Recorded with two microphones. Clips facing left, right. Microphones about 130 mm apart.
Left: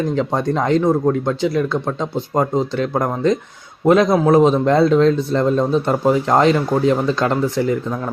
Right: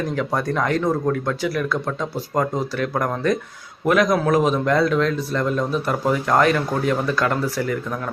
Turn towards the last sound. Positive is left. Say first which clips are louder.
# left 5 dB
turn(degrees=25)  # may be behind; listen again after turning